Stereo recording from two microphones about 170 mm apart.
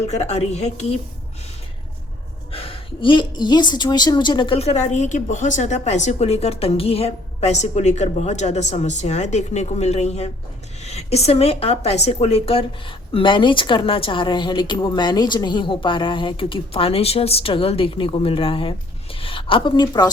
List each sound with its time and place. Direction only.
0.1 s a woman's voice: 40° left (ahead or behind)
2.5 s a woman's voice: 35° left (ahead or behind)